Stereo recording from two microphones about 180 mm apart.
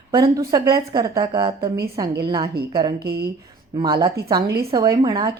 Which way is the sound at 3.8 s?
25° right (ahead or behind).